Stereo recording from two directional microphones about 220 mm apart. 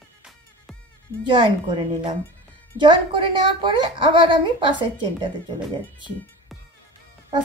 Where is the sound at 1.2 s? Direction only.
20° right (ahead or behind).